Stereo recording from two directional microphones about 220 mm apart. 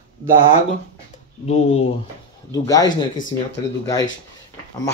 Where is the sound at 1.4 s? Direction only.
30° left (ahead or behind).